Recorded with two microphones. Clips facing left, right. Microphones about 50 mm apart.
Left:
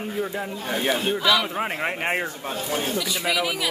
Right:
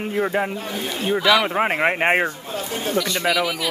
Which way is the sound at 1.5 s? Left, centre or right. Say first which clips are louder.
Right 7 dB; right.